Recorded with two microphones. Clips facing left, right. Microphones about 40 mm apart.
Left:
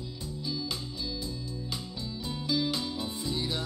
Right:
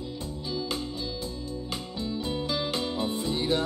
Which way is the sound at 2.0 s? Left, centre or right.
Right.